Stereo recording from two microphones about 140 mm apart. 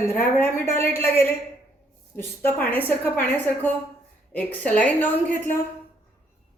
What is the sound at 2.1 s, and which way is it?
A woman's voice, 15° left (ahead or behind).